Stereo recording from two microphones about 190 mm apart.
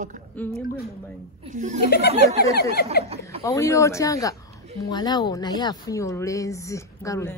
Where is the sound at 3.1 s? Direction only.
30° right (ahead or behind).